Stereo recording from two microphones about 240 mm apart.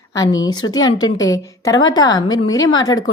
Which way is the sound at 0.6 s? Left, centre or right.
Left.